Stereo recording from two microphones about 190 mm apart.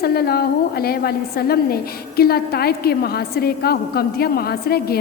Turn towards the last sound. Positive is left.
turn(degrees=55)  # may be behind; listen again after turning